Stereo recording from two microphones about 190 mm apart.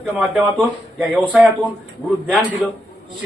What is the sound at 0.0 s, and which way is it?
Speech, 5° right (ahead or behind).